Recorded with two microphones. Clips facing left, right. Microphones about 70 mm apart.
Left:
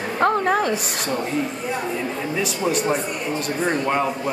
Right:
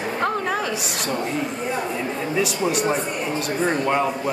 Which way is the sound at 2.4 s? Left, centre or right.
Centre.